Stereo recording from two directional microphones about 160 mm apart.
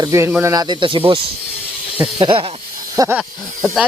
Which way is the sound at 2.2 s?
35° right (ahead or behind).